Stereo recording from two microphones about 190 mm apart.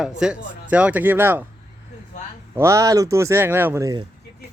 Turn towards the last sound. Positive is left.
turn(degrees=-15)  # may be behind; listen again after turning